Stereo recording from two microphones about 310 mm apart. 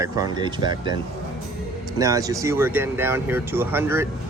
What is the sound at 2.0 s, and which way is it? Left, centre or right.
Speech, centre.